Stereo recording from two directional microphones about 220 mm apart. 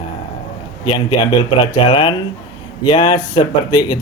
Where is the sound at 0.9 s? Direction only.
20° left (ahead or behind).